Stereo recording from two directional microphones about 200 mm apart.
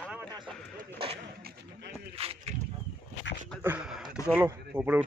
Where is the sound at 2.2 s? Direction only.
30° right (ahead or behind).